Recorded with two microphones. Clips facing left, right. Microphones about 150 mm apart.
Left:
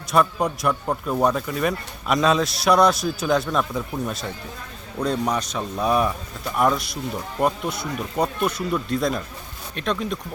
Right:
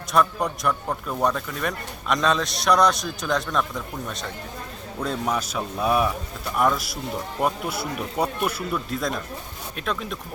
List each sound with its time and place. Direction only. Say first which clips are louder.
0.1 s a man's voice: left 2 dB; centre (ahead or behind)
0.9 s speech: left 4 dB; 20° left (ahead or behind)
1.2 s a man's voice: left 3 dB; 5° left (ahead or behind)